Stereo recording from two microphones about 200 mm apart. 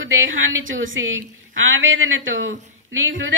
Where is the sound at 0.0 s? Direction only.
80° right.